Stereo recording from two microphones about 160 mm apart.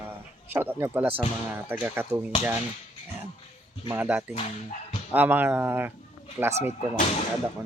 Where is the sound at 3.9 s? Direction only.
10° right (ahead or behind).